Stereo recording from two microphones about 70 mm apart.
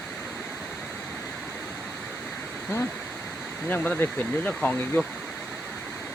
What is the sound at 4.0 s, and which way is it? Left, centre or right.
Speech, centre.